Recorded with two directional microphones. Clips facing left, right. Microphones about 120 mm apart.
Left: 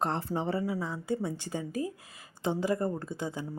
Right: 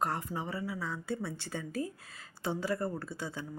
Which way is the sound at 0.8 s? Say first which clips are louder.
Left 4 dB; 15° left (ahead or behind).